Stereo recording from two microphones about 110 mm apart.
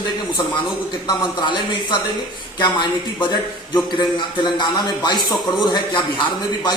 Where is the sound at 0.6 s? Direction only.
45° left (ahead or behind).